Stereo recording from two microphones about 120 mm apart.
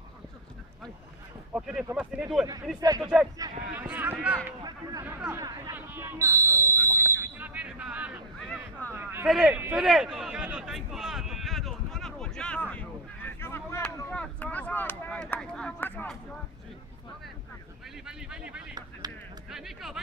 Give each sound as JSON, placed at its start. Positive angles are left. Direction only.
{"t": 1.5, "sound": "speech", "side_deg": -5}
{"t": 6.9, "sound": "smoke detector", "side_deg": -25}
{"t": 8.5, "sound": "boat", "side_deg": 10}
{"t": 8.9, "sound": "a man's voice", "side_deg": -20}
{"t": 9.3, "sound": "speech", "side_deg": 0}
{"t": 9.7, "sound": "a sound", "side_deg": -5}
{"t": 14.1, "sound": "speech", "side_deg": 10}
{"t": 18.0, "sound": "speech", "side_deg": -10}